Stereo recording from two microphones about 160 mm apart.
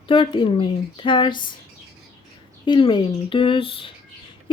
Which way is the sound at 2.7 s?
30° left (ahead or behind).